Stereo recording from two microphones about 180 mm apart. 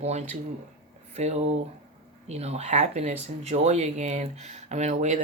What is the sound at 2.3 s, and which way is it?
Speech, 35° right (ahead or behind).